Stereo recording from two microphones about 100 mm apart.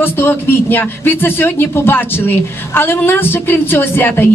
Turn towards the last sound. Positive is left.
turn(degrees=20)  # may be behind; listen again after turning